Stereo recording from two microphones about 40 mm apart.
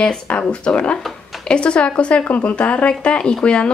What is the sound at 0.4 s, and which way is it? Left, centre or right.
Speech, left.